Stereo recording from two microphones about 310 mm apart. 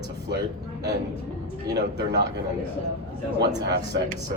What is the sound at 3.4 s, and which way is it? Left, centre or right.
Speech, right.